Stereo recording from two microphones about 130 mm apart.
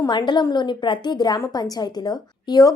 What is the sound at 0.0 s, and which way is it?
A woman's voice, 35° left (ahead or behind).